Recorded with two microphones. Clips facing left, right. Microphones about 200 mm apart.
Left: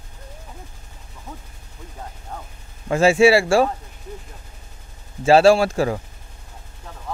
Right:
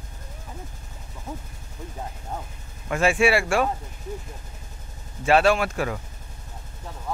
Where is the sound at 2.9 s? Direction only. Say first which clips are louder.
Left 6 dB; 30° left (ahead or behind).